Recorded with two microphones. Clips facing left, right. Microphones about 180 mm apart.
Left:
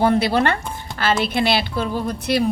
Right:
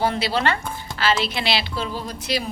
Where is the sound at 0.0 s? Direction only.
50° left (ahead or behind).